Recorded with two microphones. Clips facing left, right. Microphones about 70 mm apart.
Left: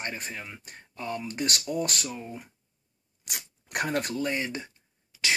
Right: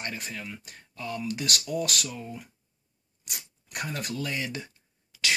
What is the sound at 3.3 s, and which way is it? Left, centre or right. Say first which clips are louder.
Speech: left 3 dB; left.